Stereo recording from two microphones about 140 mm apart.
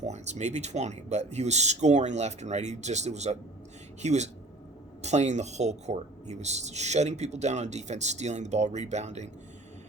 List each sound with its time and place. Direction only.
0.0 s speech: 55° right (ahead or behind)